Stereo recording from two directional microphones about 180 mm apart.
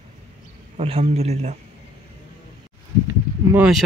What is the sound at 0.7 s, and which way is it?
Speech, 30° right (ahead or behind).